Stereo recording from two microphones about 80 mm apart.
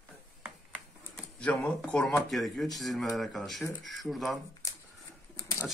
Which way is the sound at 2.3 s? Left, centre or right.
Centre.